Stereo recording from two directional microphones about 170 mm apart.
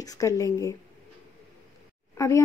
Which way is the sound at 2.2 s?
20° left (ahead or behind).